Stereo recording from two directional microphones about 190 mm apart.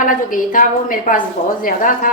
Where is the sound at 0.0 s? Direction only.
45° left (ahead or behind).